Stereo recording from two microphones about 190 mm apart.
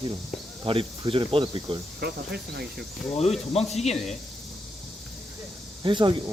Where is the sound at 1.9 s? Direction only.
60° right (ahead or behind).